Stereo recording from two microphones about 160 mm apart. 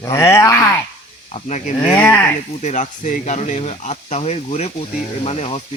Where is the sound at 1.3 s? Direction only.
45° left (ahead or behind).